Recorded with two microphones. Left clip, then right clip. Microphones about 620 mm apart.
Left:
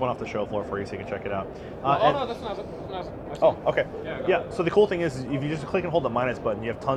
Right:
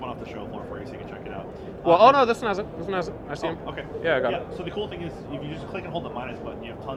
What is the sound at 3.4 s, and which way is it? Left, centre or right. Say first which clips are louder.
Speech: left 12 dB; left.